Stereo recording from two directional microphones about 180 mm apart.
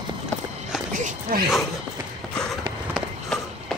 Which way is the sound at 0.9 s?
45° right (ahead or behind).